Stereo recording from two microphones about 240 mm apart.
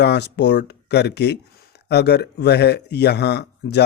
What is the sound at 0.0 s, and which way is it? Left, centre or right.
Speech, left.